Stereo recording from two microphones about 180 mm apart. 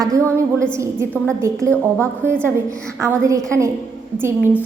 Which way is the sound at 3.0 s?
15° right (ahead or behind).